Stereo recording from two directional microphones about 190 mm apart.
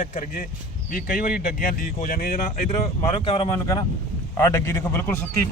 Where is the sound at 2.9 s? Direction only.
25° left (ahead or behind).